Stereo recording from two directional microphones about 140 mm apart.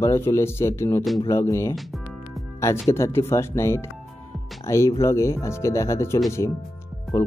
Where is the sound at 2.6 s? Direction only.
20° left (ahead or behind).